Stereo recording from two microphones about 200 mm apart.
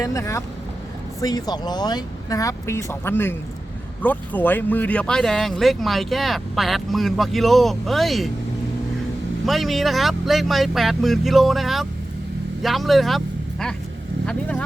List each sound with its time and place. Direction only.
0.0 s speech: 15° left (ahead or behind); by 8.3 s centre (ahead or behind)
9.5 s speech: centre (ahead or behind)